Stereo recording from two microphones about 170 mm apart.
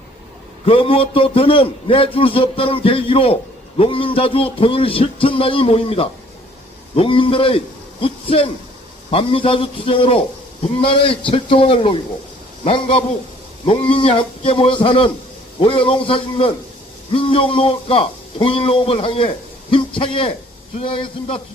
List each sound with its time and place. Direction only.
0.6 s a man's voice: 35° left (ahead or behind)